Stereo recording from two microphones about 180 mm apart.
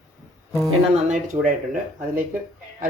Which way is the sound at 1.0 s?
45° right (ahead or behind).